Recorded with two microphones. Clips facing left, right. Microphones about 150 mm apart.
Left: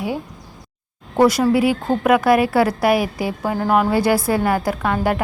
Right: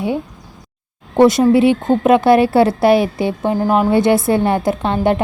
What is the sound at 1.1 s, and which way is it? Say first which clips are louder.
A woman's voice: right 4 dB; 25° right (ahead or behind).